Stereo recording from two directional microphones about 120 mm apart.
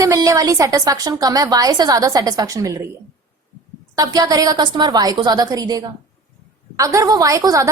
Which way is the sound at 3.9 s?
30° right (ahead or behind).